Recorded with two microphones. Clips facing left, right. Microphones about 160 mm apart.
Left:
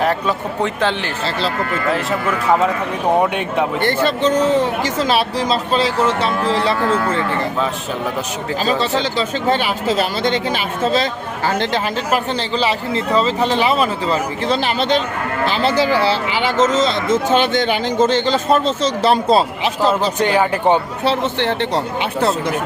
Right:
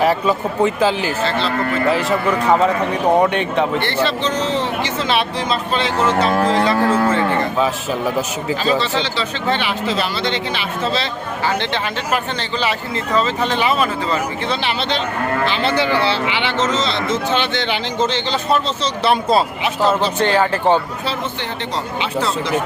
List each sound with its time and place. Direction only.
0.0 s speech: 5° right (ahead or behind)
3.2 s speech: 5° left (ahead or behind)
3.8 s speech: 45° left (ahead or behind)
6.1 s speech: 40° right (ahead or behind)
8.6 s a man's voice: 40° left (ahead or behind)
20.1 s speech: 15° left (ahead or behind)
21.0 s speech: 70° left (ahead or behind)
22.2 s speech: 55° left (ahead or behind)